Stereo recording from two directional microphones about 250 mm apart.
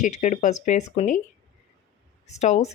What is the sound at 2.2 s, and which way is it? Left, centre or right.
Speech, left.